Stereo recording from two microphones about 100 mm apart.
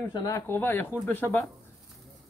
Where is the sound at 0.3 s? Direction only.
20° left (ahead or behind).